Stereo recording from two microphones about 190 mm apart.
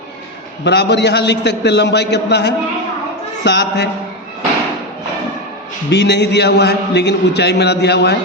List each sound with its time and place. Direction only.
0.6 s a man's voice: 65° left (ahead or behind)
5.9 s a man's voice: 65° left (ahead or behind)